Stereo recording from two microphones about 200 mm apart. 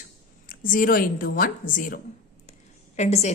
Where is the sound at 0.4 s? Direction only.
45° left (ahead or behind).